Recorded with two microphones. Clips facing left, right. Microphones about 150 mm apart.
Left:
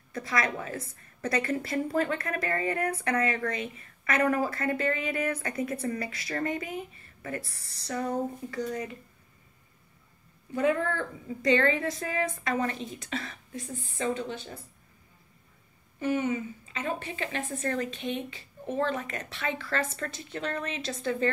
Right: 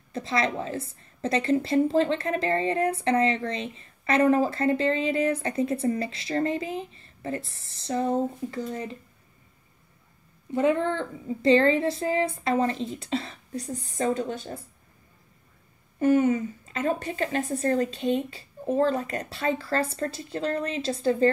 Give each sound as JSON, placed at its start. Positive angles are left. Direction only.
{"t": 0.1, "sound": "a woman's voice", "side_deg": -25}
{"t": 10.5, "sound": "a woman's voice", "side_deg": -25}
{"t": 16.0, "sound": "a woman's voice", "side_deg": -45}